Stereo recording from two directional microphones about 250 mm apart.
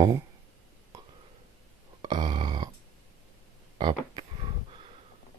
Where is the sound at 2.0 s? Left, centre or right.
Centre.